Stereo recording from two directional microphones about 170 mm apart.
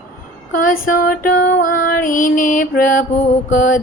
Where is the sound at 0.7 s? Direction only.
55° left (ahead or behind).